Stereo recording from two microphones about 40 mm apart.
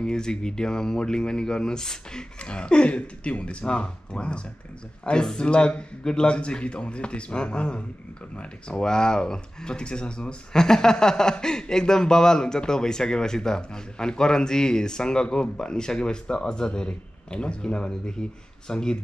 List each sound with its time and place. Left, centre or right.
0.0 s speech: centre